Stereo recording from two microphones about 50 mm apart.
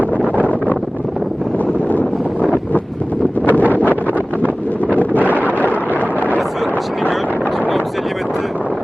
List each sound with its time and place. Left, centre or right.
3.4 s wind noise: left
4.9 s wind noise: left
5.3 s wind noise: right